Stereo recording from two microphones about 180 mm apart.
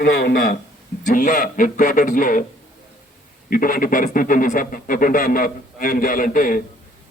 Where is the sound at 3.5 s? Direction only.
50° left (ahead or behind).